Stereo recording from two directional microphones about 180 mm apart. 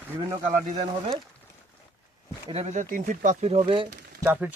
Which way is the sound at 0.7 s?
40° right (ahead or behind).